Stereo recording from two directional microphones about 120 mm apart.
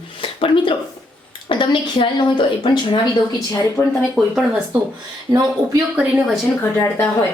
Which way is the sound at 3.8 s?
5° left (ahead or behind).